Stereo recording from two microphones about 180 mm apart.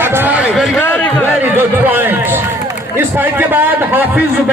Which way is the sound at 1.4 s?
10° right (ahead or behind).